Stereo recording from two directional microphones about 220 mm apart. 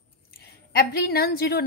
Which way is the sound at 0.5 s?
45° left (ahead or behind).